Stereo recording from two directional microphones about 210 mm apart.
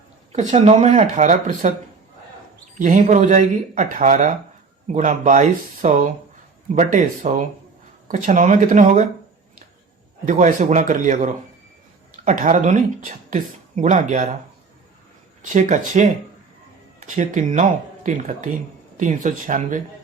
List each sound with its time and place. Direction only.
0.5 s speech: 30° right (ahead or behind)
2.7 s speech: 35° right (ahead or behind)
10.2 s speech: 35° right (ahead or behind)
15.4 s speech: 35° right (ahead or behind)
17.2 s speech: 35° right (ahead or behind)